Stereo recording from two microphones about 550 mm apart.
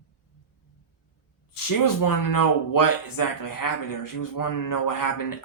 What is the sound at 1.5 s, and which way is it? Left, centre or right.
Speech, left.